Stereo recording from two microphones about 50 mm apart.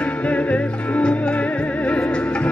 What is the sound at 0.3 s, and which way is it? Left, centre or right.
Music, left.